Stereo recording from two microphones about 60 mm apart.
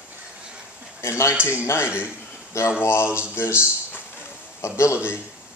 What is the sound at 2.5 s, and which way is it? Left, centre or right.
Speech, left.